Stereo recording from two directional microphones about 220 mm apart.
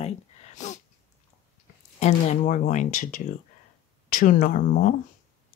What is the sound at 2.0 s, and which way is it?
Speech, 30° left (ahead or behind).